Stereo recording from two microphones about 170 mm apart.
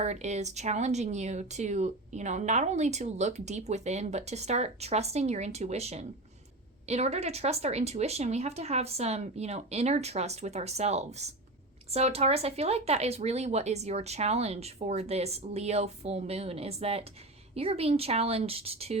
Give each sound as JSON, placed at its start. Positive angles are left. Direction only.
{"t": 0.0, "sound": "speech", "side_deg": -40}